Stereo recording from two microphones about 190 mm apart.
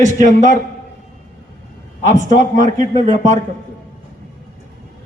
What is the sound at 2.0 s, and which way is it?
A man's voice, 40° right (ahead or behind).